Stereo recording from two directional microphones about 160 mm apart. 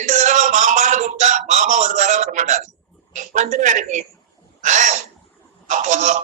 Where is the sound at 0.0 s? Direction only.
50° right (ahead or behind).